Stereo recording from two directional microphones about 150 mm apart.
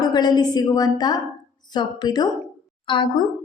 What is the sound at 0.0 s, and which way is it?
Speech, 30° left (ahead or behind).